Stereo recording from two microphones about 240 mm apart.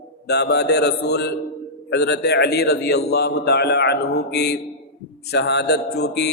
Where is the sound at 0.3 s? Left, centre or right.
Left.